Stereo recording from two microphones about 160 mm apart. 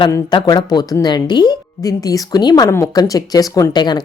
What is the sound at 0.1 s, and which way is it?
A woman's voice, 25° left (ahead or behind).